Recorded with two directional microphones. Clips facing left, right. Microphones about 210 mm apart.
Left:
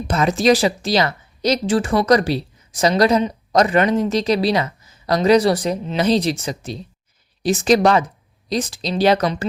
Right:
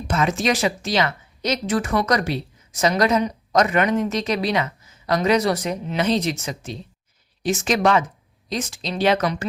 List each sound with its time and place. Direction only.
0.1 s a woman's voice: 35° left (ahead or behind)